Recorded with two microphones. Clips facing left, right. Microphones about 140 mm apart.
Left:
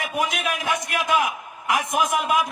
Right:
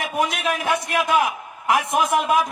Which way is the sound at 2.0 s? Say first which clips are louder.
Right 1 dB; 30° right (ahead or behind).